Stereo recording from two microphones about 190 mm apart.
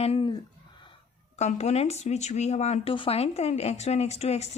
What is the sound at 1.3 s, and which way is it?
Speech, 35° left (ahead or behind).